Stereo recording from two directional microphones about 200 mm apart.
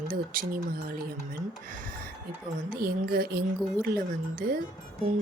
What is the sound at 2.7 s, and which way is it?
Speech, 50° right (ahead or behind).